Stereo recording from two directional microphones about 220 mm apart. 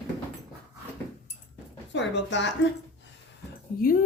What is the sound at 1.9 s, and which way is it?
Speech, 55° left (ahead or behind).